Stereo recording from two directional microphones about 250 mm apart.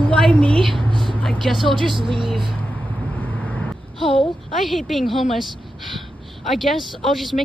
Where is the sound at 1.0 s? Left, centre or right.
Centre.